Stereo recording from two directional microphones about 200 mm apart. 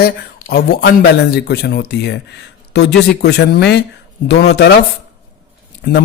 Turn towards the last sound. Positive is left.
turn(degrees=55)  # may be behind; listen again after turning